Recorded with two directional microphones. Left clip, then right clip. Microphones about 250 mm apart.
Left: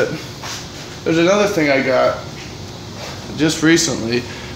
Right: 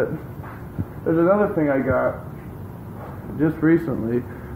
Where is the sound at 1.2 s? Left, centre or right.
Left.